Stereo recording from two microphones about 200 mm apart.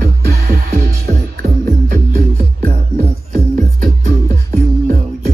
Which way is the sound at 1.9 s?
40° right (ahead or behind).